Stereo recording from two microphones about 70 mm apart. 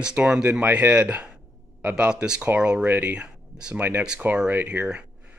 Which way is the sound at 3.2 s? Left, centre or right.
Centre.